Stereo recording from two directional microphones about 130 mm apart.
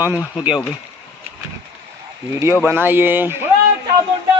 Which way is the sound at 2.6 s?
15° right (ahead or behind).